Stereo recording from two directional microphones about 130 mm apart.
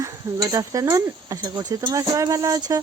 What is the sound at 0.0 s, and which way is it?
Speech, 25° right (ahead or behind).